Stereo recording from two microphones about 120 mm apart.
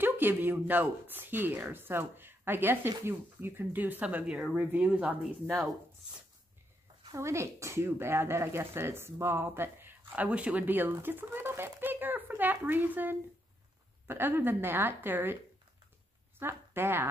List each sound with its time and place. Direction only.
0.0 s speech: 15° right (ahead or behind)
7.2 s speech: 25° right (ahead or behind)
16.3 s speech: 20° right (ahead or behind)